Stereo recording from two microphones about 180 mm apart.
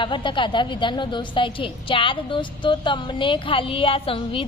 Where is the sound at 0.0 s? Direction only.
25° left (ahead or behind).